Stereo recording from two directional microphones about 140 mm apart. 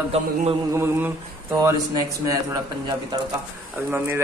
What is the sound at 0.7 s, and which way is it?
Speech, 15° right (ahead or behind).